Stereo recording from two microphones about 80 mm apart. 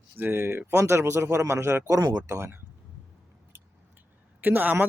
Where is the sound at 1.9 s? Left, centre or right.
Right.